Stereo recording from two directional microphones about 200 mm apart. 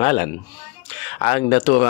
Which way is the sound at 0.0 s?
35° left (ahead or behind).